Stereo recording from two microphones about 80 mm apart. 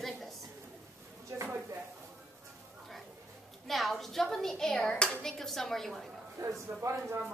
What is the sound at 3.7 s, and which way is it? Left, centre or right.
A woman's voice, centre.